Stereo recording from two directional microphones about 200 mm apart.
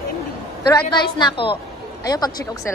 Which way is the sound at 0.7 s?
20° left (ahead or behind).